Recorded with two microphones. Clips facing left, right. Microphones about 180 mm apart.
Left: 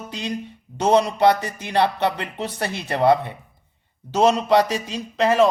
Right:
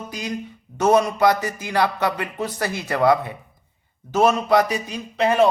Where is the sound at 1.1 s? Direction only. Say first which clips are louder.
Left 1 dB; 30° left (ahead or behind).